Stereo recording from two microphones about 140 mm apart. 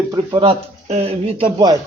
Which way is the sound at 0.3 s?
35° right (ahead or behind).